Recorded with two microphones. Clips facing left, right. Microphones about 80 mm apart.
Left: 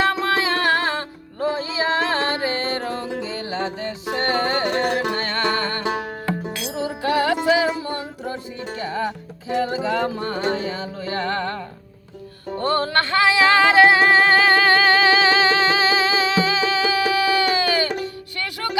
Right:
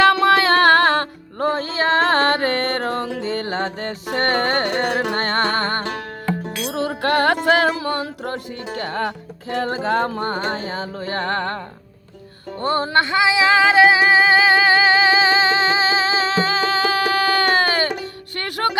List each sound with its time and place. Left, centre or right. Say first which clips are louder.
0.0 s music: right 6 dB; right
5.1 s music: right 2 dB; right
5.8 s music: left 2 dB; centre
6.7 s music: right 3 dB; right
12.5 s music: right 2 dB; right